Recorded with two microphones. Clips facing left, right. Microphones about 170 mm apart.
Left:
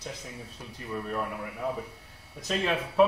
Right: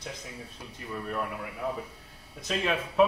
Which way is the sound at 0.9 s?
5° left (ahead or behind).